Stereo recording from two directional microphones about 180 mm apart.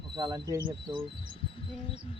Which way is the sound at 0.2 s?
25° right (ahead or behind).